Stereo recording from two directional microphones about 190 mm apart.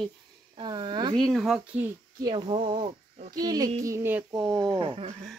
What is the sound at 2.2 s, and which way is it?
A woman's voice, 25° right (ahead or behind).